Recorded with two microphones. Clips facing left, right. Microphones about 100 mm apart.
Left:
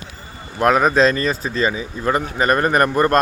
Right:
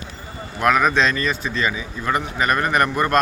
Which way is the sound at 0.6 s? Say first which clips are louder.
Left 3 dB; 35° left (ahead or behind).